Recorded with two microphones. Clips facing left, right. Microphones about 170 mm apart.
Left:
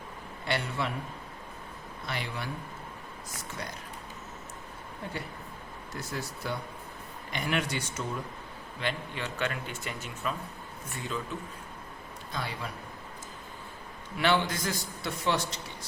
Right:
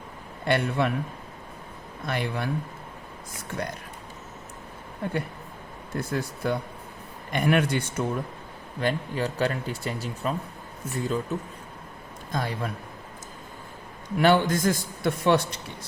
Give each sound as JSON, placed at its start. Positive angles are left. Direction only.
{"t": 0.4, "sound": "speech", "side_deg": -55}
{"t": 2.0, "sound": "speech", "side_deg": -55}
{"t": 3.5, "sound": "speech", "side_deg": -55}
{"t": 6.0, "sound": "speech", "side_deg": -55}
{"t": 8.8, "sound": "speech", "side_deg": -40}
{"t": 12.3, "sound": "a man's voice", "side_deg": -45}
{"t": 14.2, "sound": "a man's voice", "side_deg": -45}